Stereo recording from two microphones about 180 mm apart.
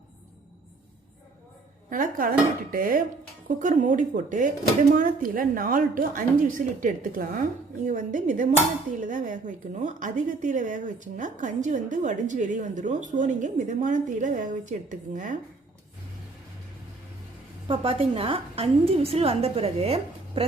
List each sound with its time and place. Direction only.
1.9 s a woman's voice: 50° right (ahead or behind)
17.7 s a woman's voice: 30° right (ahead or behind)